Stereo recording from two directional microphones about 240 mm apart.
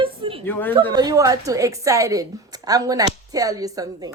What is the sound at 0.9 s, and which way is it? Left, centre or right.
A woman's voice, centre.